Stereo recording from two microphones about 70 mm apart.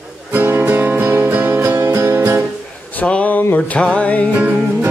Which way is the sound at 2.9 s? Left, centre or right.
Centre.